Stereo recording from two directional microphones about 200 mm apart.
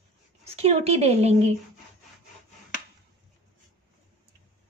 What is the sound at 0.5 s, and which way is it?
Speech, 30° right (ahead or behind).